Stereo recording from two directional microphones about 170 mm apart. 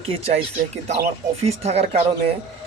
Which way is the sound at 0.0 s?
35° right (ahead or behind).